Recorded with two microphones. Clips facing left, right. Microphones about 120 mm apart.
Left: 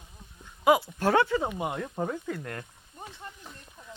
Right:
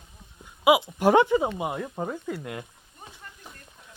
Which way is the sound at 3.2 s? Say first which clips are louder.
Left 4 dB; 25° left (ahead or behind).